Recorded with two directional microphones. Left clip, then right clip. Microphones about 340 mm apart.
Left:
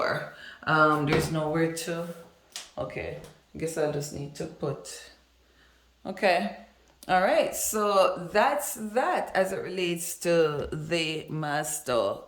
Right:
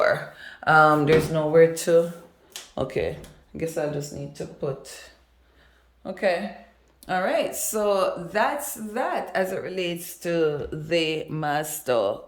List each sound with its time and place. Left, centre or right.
0.0 s speech: centre
3.6 s a woman's voice: centre